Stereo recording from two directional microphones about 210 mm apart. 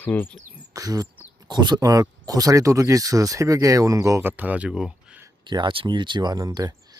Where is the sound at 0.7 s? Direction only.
15° right (ahead or behind).